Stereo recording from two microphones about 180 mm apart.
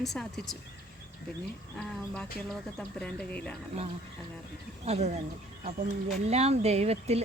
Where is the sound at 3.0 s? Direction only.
5° left (ahead or behind).